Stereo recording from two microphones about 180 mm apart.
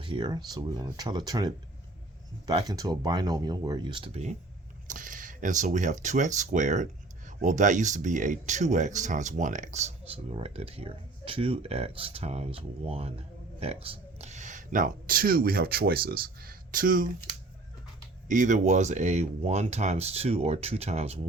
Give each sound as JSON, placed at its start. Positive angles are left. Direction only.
{"t": 0.0, "sound": "speech", "side_deg": -25}
{"t": 4.9, "sound": "speech", "side_deg": -50}
{"t": 18.3, "sound": "speech", "side_deg": -45}